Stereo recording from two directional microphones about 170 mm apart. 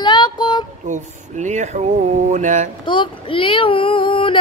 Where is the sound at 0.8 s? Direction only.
45° right (ahead or behind).